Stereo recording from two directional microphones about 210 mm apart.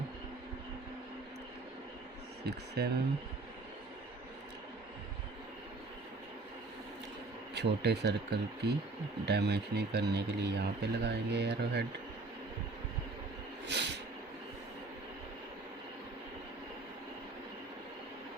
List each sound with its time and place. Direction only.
2.4 s speech: 50° right (ahead or behind)
7.5 s speech: 55° right (ahead or behind)
13.7 s a sound: 55° right (ahead or behind)